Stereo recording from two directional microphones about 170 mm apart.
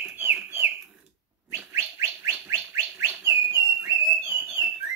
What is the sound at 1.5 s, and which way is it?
Bird, 15° right (ahead or behind).